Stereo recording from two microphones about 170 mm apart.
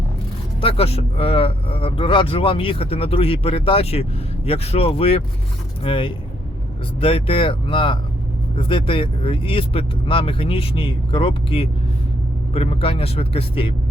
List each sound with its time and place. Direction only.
0.6 s speech: 35° left (ahead or behind)